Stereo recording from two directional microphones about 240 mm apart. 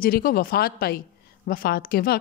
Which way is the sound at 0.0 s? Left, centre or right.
Left.